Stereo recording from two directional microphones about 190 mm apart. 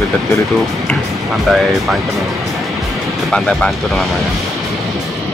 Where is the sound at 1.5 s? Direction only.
Centre (ahead or behind).